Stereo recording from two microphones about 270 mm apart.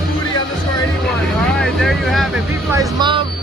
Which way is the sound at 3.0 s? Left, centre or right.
Centre.